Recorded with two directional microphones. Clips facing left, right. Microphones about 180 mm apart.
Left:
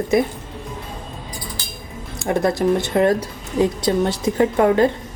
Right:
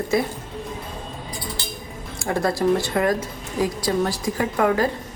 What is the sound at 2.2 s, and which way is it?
Speech, 20° left (ahead or behind).